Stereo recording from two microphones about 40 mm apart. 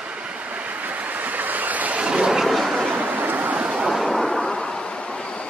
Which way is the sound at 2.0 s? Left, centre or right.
Right.